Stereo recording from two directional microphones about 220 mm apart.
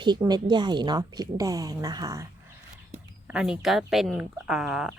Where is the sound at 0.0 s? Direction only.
20° right (ahead or behind).